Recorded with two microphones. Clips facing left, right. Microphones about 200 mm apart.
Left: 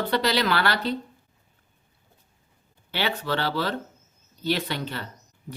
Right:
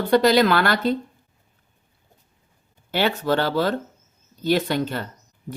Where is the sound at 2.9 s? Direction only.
45° right (ahead or behind).